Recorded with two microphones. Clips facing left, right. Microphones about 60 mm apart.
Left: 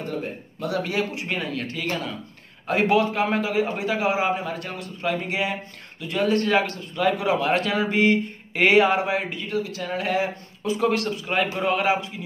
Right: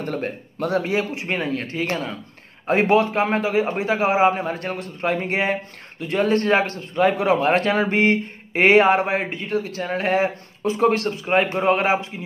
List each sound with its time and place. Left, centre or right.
0.0 s a man's voice: right
0.8 s a man's voice: right